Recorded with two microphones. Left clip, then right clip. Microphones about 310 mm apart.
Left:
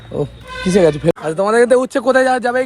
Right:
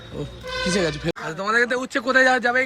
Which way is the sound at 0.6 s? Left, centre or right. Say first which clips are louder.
Left 12 dB; centre.